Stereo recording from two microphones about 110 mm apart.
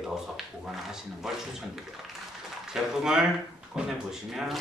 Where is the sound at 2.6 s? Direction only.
5° right (ahead or behind).